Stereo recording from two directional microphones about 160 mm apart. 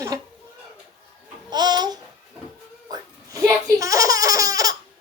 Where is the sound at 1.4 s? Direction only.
25° right (ahead or behind).